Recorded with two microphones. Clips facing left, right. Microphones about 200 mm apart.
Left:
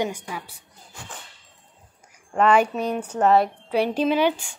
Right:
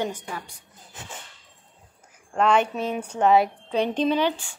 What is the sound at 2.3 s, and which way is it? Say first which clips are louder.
A woman's voice: left 2 dB; 5° left (ahead or behind).